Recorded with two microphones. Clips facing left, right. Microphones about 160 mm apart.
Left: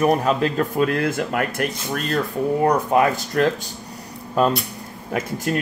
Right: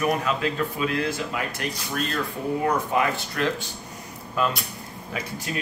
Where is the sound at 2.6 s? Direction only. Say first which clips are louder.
Left 6 dB; 45° left (ahead or behind).